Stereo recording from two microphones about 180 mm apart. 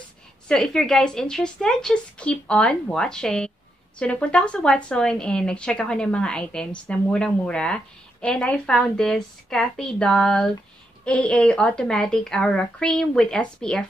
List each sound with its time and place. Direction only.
0.5 s a woman's voice: 5° left (ahead or behind)